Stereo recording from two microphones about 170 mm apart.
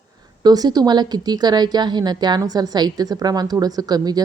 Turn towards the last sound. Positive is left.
turn(degrees=-20)  # may be behind; listen again after turning